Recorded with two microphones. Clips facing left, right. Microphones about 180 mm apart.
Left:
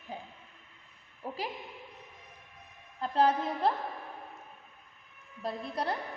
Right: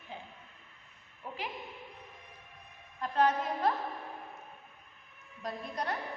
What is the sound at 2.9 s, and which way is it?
Speech, 30° left (ahead or behind).